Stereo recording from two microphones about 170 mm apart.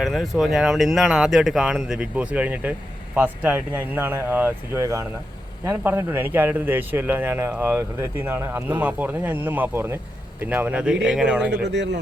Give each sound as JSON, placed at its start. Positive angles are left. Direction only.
{"t": 0.0, "sound": "speech", "side_deg": 0}
{"t": 11.6, "sound": "speech", "side_deg": -90}